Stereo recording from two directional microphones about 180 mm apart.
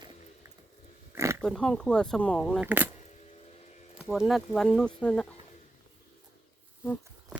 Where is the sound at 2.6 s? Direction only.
10° right (ahead or behind).